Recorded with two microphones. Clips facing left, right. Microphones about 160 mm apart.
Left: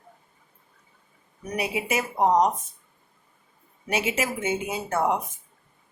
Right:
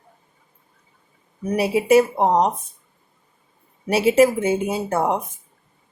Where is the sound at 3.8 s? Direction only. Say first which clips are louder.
Right 12 dB; 35° right (ahead or behind).